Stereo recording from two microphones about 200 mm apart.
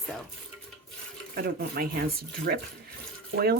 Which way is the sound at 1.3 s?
50° right (ahead or behind).